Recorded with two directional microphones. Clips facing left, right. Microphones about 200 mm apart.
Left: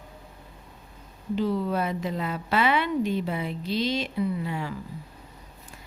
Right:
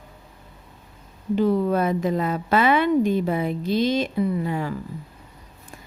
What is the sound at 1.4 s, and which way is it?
Speech, 50° right (ahead or behind).